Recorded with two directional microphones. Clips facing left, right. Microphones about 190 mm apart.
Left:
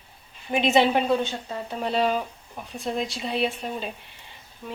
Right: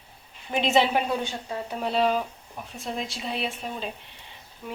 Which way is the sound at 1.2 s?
15° right (ahead or behind).